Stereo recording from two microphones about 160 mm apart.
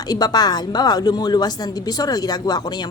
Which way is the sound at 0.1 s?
25° left (ahead or behind).